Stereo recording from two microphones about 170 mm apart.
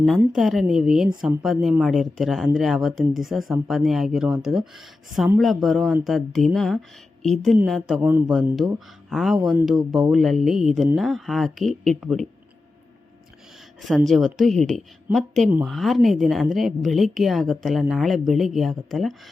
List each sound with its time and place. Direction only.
0.3 s speech: centre (ahead or behind)
13.8 s speech: centre (ahead or behind)